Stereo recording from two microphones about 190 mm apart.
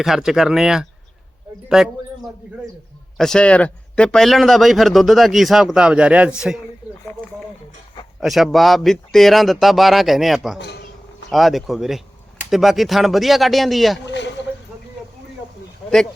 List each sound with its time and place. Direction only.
0.0 s speech: centre (ahead or behind)
3.2 s speech: 5° left (ahead or behind)
8.2 s speech: centre (ahead or behind)
14.0 s speech: 70° left (ahead or behind)